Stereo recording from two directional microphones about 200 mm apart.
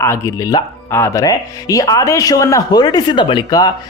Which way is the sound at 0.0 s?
15° left (ahead or behind).